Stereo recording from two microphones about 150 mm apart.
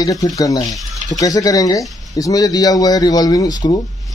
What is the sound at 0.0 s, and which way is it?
Speech, 25° left (ahead or behind).